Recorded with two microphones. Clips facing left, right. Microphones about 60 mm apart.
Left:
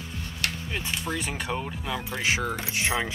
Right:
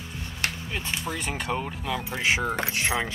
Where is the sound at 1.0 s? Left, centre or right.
Centre.